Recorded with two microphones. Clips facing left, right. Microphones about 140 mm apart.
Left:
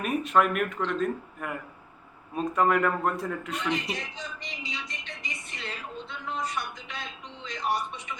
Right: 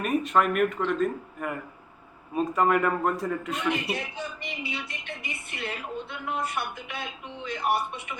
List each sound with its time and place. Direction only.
0.0 s a man's voice: centre (ahead or behind)
3.7 s speech: 55° right (ahead or behind)